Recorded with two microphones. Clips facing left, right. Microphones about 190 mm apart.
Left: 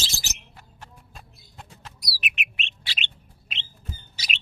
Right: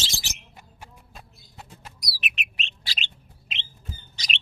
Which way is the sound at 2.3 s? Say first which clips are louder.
Left 1 dB; 40° right (ahead or behind).